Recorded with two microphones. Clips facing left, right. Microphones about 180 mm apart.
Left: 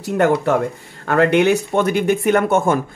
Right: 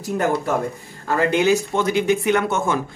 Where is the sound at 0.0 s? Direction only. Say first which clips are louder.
Left 5 dB; 70° left (ahead or behind).